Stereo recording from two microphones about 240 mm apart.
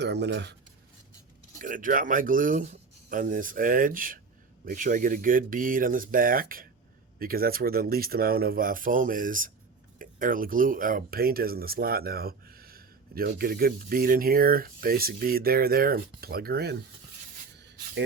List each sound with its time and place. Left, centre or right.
0.0 s speech: right
1.5 s speech: right